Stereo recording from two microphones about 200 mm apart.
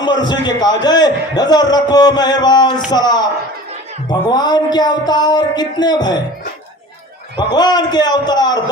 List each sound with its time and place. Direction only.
0.0 s a man's voice: 20° left (ahead or behind)
7.3 s a man's voice: 20° left (ahead or behind)